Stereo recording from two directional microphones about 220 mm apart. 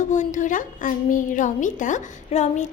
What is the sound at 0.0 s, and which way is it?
A woman's voice, 35° left (ahead or behind).